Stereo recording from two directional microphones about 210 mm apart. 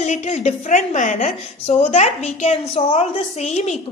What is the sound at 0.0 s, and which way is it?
A woman's voice, 35° left (ahead or behind).